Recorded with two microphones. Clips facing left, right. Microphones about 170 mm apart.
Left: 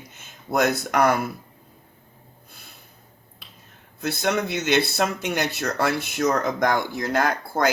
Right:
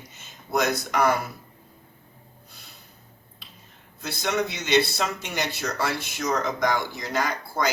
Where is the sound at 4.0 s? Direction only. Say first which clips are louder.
Left 3 dB; 55° left (ahead or behind).